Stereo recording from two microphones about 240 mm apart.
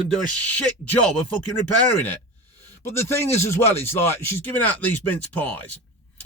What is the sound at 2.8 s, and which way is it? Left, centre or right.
Speech, centre.